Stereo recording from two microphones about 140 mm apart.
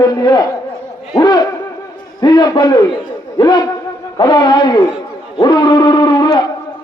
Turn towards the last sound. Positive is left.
turn(degrees=30)  # may be behind; listen again after turning